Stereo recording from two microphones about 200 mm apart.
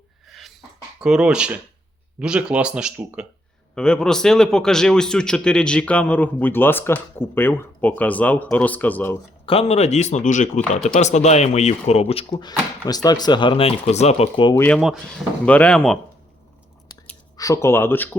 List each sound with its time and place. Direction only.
0.3 s cough: centre (ahead or behind)
1.0 s speech: 5° right (ahead or behind)
9.5 s speech: 30° left (ahead or behind)
12.3 s speech: 20° left (ahead or behind)
14.5 s speech: 10° left (ahead or behind)
17.3 s speech: 15° left (ahead or behind)